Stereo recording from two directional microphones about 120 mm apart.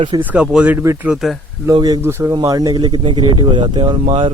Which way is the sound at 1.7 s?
35° right (ahead or behind).